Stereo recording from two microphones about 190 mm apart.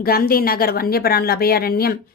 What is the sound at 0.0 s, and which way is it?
Speech, 50° left (ahead or behind).